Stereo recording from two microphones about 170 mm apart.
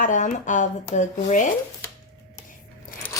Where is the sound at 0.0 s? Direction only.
50° left (ahead or behind).